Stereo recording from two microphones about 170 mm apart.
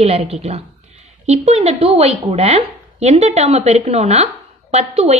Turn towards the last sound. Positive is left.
turn(degrees=-40)  # may be behind; listen again after turning